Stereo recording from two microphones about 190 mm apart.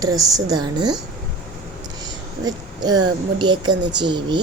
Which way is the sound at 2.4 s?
20° right (ahead or behind).